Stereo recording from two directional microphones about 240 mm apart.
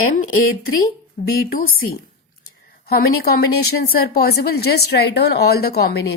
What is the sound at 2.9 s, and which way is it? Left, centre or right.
Speech, left.